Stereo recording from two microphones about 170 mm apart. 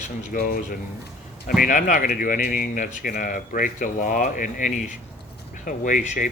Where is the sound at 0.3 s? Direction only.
55° left (ahead or behind).